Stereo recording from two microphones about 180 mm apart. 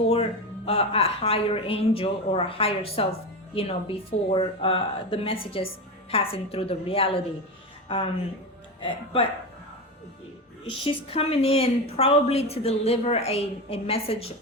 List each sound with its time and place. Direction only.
0.1 s a woman's voice: 35° left (ahead or behind)
10.8 s a woman's voice: 35° left (ahead or behind)